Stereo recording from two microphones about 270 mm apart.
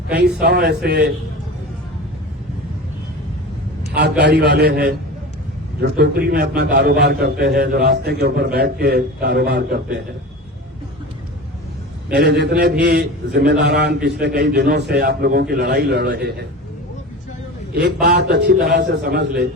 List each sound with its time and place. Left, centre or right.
0.1 s a man's voice: right
4.2 s a man's voice: right
12.1 s a man's voice: right
18.0 s a man's voice: right